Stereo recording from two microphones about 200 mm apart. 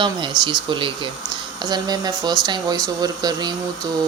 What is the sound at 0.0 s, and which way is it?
Speech, 25° right (ahead or behind).